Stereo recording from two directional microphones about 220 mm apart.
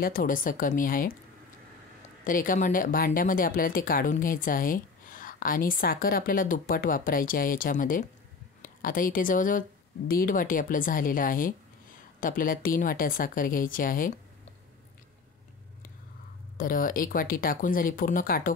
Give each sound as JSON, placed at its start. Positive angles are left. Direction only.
{"t": 0.0, "sound": "speech", "side_deg": 40}
{"t": 2.2, "sound": "speech", "side_deg": 40}
{"t": 16.5, "sound": "speech", "side_deg": 40}